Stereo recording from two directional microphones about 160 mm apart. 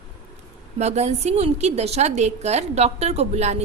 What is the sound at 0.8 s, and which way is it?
A woman's voice, 45° right (ahead or behind).